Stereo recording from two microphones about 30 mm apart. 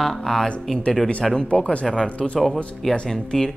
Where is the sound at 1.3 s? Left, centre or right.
Left.